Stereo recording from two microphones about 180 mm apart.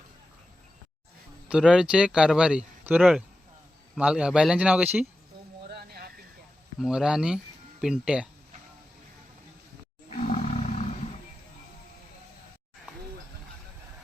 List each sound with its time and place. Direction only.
1.5 s speech: 5° right (ahead or behind)
5.6 s a sound: 60° right (ahead or behind)
6.7 s speech: 5° right (ahead or behind)
10.2 s roar: 40° left (ahead or behind)